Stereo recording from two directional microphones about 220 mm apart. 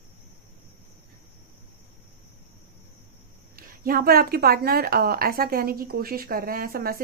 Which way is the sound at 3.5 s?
40° right (ahead or behind).